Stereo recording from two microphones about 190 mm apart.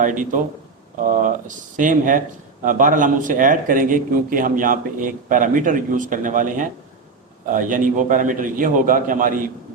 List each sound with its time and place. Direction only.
0.0 s a man's voice: 45° right (ahead or behind)